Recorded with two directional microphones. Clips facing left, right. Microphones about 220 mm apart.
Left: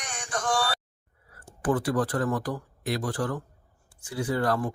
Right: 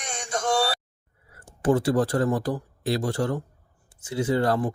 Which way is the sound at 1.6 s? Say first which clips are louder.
Right 4 dB; 25° right (ahead or behind).